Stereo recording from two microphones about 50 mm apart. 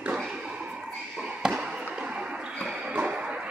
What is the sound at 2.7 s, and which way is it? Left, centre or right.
Music, right.